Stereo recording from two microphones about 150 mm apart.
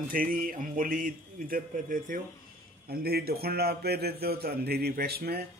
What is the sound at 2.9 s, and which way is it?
A man's voice, 90° right.